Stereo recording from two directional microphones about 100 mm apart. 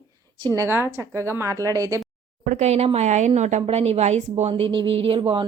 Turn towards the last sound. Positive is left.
turn(degrees=-65)  # may be behind; listen again after turning